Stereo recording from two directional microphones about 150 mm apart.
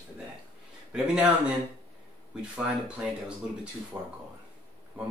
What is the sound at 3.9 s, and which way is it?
Speech, 20° right (ahead or behind).